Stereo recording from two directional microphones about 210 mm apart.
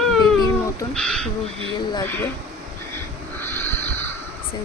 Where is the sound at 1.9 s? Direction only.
10° left (ahead or behind).